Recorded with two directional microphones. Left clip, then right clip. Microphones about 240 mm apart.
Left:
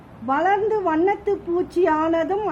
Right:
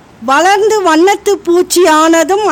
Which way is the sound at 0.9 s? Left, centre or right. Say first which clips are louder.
Right 12 dB; right.